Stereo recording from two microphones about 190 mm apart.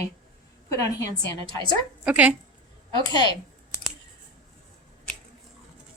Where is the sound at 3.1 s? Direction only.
20° left (ahead or behind).